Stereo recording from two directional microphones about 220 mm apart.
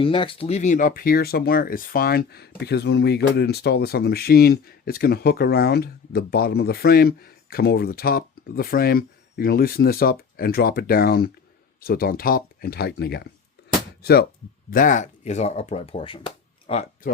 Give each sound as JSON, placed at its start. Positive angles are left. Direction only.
{"t": 0.0, "sound": "speech", "side_deg": 25}